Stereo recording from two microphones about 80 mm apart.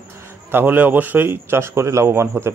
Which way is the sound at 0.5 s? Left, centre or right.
Right.